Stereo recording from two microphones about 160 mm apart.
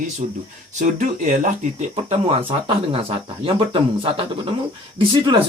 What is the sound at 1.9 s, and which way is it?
Speech, 35° right (ahead or behind).